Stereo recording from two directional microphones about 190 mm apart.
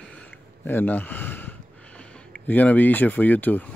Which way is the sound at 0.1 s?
5° left (ahead or behind).